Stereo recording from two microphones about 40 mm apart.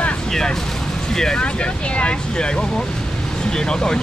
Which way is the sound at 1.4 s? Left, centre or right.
Left.